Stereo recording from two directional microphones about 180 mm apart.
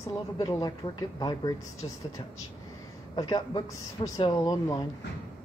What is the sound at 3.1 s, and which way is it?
Speech, 25° left (ahead or behind).